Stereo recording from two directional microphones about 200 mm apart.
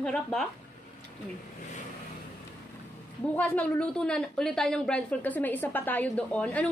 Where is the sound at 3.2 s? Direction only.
10° left (ahead or behind).